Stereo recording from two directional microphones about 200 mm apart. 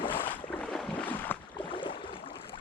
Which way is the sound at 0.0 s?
25° left (ahead or behind).